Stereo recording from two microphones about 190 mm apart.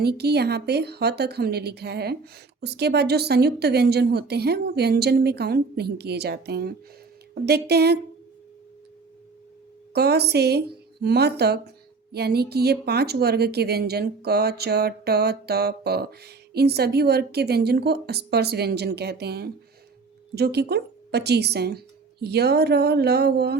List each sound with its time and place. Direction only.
0.0 s speech: 60° right (ahead or behind)
9.9 s speech: 60° right (ahead or behind)